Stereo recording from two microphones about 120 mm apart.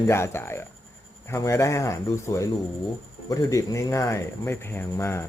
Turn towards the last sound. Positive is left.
turn(degrees=20)  # may be behind; listen again after turning